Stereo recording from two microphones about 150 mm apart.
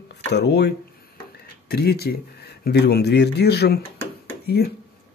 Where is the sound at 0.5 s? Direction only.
90° left.